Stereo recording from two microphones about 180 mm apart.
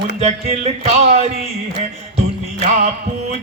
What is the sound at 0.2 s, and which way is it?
A man's voice, 35° right (ahead or behind).